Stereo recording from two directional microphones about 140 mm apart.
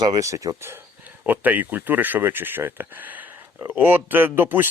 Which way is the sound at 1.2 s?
10° right (ahead or behind).